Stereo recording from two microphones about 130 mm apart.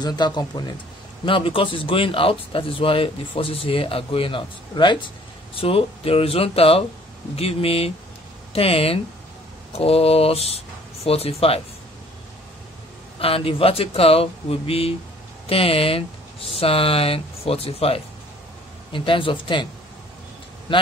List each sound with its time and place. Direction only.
0.0 s a man's voice: 35° left (ahead or behind); by 11.6 s 50° left (ahead or behind)
13.2 s a man's voice: 45° left (ahead or behind)